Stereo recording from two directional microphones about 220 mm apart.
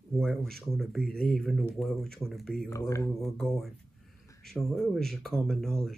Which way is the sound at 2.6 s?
15° left (ahead or behind).